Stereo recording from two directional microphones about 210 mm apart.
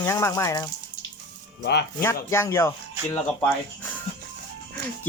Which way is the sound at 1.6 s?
50° left (ahead or behind).